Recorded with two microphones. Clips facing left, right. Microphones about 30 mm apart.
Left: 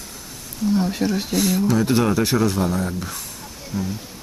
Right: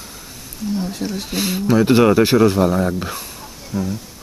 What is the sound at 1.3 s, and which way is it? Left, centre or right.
Speech, right.